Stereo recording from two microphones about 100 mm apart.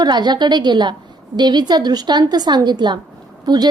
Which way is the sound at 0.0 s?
45° right (ahead or behind).